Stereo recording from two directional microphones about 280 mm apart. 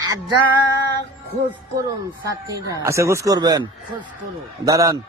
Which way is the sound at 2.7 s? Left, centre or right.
Centre.